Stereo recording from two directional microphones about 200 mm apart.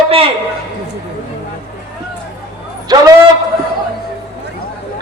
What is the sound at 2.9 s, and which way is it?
Speech, 20° right (ahead or behind).